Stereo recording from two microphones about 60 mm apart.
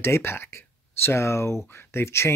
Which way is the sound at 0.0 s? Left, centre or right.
Left.